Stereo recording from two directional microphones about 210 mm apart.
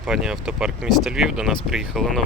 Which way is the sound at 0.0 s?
Centre (ahead or behind).